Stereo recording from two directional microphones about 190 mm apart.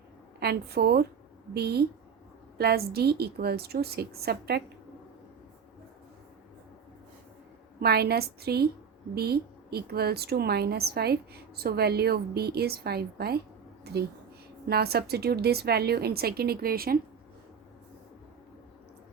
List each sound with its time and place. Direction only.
0.3 s a woman's voice: 55° right (ahead or behind)
7.8 s a woman's voice: 55° right (ahead or behind)